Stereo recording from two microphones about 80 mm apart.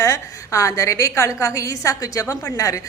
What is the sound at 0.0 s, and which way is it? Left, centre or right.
A woman's voice, left.